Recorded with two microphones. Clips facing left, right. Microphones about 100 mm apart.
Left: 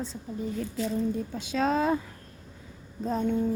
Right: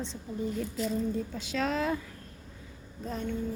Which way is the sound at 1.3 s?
20° left (ahead or behind).